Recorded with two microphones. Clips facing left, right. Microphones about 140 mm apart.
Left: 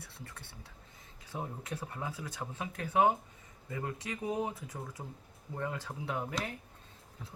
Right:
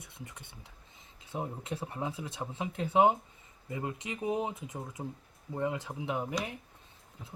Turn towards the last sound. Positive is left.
turn(degrees=-15)  # may be behind; listen again after turning